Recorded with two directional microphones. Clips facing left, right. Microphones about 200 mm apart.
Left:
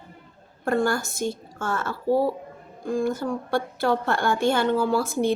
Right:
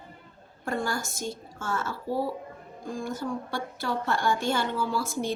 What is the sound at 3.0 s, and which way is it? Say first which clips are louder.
A woman's voice: left 4 dB; 55° left (ahead or behind).